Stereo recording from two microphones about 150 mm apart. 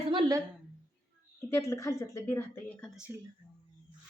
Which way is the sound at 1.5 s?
20° left (ahead or behind).